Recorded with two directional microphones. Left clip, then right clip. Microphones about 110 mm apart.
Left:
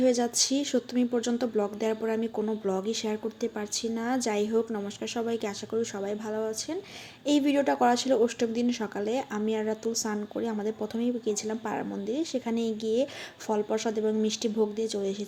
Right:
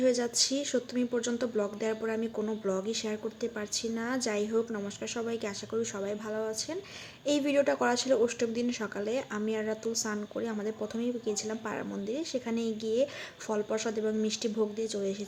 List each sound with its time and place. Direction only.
0.0 s speech: 30° left (ahead or behind)